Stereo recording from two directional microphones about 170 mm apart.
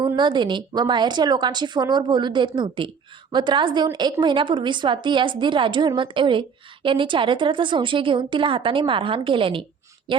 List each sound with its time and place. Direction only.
0.2 s a woman's voice: 25° right (ahead or behind)